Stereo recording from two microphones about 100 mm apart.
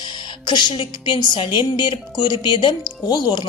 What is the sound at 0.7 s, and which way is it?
A woman's voice, 50° left (ahead or behind).